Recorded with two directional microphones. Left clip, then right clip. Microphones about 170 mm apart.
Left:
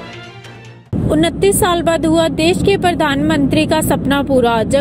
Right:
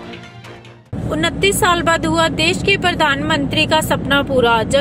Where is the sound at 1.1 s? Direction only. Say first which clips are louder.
Left 3 dB; 20° left (ahead or behind).